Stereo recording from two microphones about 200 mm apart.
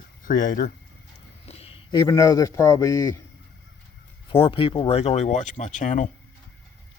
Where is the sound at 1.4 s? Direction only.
30° left (ahead or behind).